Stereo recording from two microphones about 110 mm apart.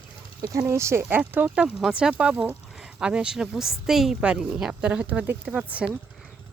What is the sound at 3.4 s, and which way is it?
A woman's voice, 5° right (ahead or behind).